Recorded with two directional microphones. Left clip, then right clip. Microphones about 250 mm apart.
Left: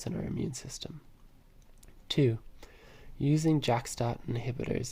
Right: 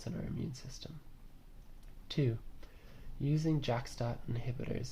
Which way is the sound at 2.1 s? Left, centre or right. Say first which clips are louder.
Left 8 dB; left.